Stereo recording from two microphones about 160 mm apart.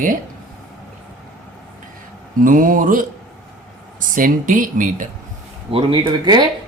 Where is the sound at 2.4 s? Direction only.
60° right (ahead or behind).